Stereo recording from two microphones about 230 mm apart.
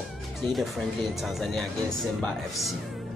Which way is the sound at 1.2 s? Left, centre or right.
Centre.